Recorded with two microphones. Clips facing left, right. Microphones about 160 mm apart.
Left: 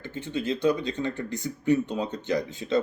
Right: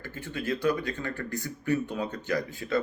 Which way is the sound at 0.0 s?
20° left (ahead or behind).